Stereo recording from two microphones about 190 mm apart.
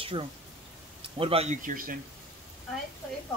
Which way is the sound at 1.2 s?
30° right (ahead or behind).